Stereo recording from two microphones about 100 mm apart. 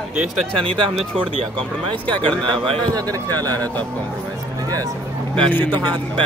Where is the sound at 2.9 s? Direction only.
40° right (ahead or behind).